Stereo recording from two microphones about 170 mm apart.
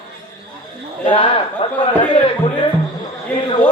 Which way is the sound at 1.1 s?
30° left (ahead or behind).